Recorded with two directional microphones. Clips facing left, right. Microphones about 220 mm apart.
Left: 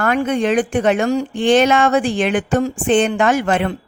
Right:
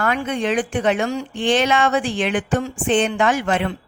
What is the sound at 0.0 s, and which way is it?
Mantra, 45° left (ahead or behind).